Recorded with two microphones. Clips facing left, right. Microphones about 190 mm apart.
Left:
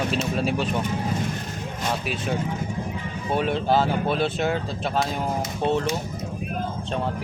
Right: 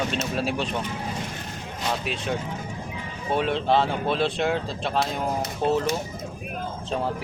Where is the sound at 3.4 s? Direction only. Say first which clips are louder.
Even; centre (ahead or behind).